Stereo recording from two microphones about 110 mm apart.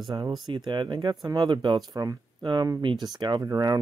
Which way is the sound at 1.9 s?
30° right (ahead or behind).